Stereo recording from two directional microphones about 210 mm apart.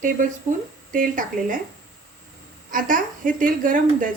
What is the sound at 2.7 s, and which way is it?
A woman's voice, 40° right (ahead or behind).